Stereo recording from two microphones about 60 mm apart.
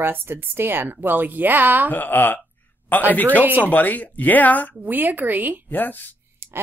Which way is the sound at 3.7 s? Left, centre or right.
Left.